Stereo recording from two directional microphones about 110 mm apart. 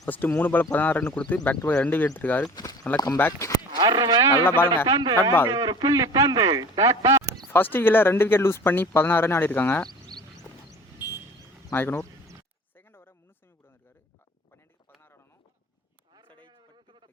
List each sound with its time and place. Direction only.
0.1 s speech: 15° left (ahead or behind)
3.8 s speech: 40° right (ahead or behind)
4.4 s speech: 20° left (ahead or behind)
4.9 s speech: 40° right (ahead or behind)
7.5 s speech: 20° left (ahead or behind)
10.9 s vehicle: 20° right (ahead or behind)
11.7 s speech: 20° left (ahead or behind)
12.7 s a sound: 20° left (ahead or behind)
16.4 s a sound: 45° right (ahead or behind)